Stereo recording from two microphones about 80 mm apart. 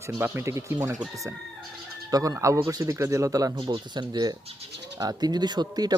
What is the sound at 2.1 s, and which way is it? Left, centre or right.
Speech, right.